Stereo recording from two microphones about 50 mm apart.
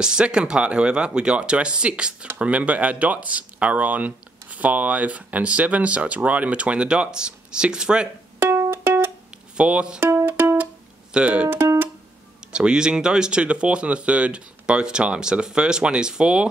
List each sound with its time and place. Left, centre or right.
0.0 s speech: centre
8.4 s music: right
9.6 s speech: right
10.2 s music: right
11.1 s speech: right
11.5 s music: right
12.5 s speech: centre